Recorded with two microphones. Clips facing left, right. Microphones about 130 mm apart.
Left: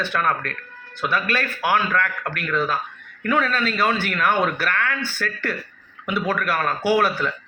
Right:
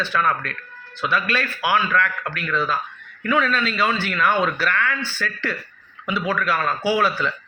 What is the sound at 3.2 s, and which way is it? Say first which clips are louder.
A man's voice: even; 45° left (ahead or behind).